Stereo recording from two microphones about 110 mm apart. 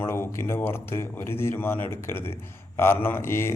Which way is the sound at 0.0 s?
20° left (ahead or behind).